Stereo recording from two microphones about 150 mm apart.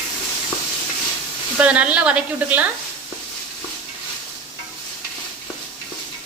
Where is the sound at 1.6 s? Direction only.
10° right (ahead or behind).